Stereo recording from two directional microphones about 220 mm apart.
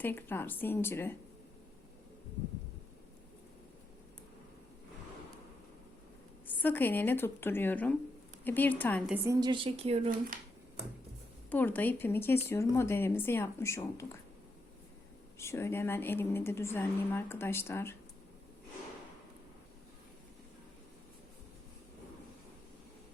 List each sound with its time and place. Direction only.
0.0 s speech: 10° left (ahead or behind)
6.5 s speech: 10° left (ahead or behind)
9.0 s a woman's voice: 10° right (ahead or behind); by 10.1 s 25° right (ahead or behind)
11.5 s speech: 10° left (ahead or behind)
15.4 s speech: 10° left (ahead or behind)